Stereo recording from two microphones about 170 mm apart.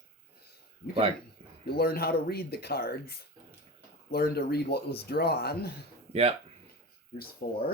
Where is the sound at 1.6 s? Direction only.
65° left (ahead or behind).